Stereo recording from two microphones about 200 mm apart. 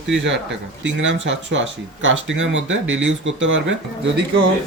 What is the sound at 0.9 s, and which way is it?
Speech, 65° right (ahead or behind).